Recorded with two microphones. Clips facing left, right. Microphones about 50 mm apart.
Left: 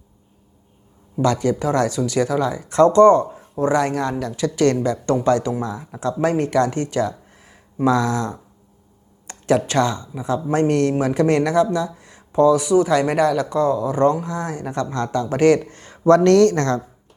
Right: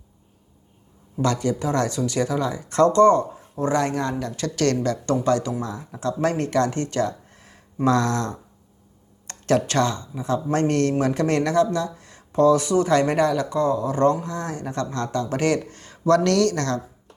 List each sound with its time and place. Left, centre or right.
1.1 s speech: left
13.4 s speech: left